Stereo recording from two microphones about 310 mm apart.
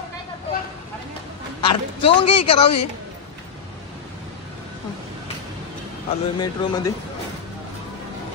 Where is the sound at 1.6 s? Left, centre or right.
Centre.